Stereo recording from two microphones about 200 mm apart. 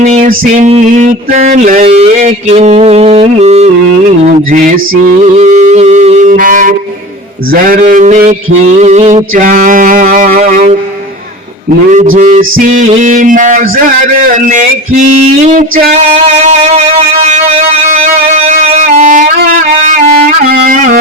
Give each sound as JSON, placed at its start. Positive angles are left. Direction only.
{"t": 0.0, "sound": "a sound", "side_deg": -30}
{"t": 0.3, "sound": "mantra", "side_deg": -40}
{"t": 12.1, "sound": "mantra", "side_deg": -35}
{"t": 16.4, "sound": "music", "side_deg": -35}
{"t": 18.3, "sound": "violin", "side_deg": -35}
{"t": 20.4, "sound": "music", "side_deg": -45}